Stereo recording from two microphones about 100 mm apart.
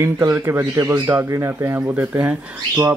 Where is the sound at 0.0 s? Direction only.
25° right (ahead or behind).